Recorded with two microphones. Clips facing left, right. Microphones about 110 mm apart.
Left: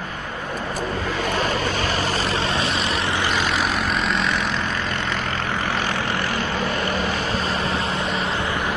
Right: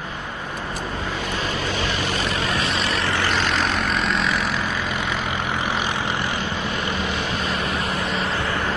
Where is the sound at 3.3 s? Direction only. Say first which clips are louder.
Even; 5° left (ahead or behind); by 7.0 s 15° right (ahead or behind).